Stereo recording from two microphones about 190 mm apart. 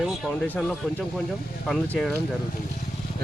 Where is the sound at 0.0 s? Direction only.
Centre (ahead or behind).